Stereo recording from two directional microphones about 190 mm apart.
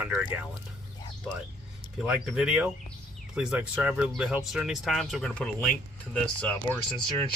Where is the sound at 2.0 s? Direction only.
5° right (ahead or behind).